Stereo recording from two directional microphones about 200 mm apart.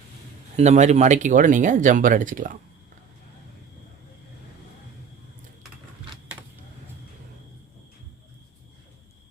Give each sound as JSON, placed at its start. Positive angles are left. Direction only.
{"t": 0.5, "sound": "speech", "side_deg": -35}